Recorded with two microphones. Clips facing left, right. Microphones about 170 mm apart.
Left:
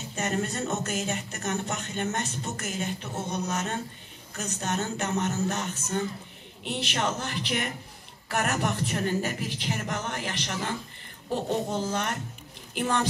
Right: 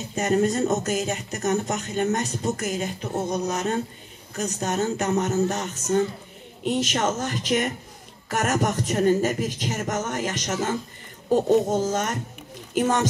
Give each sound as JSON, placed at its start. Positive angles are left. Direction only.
{"t": 0.1, "sound": "speech", "side_deg": -40}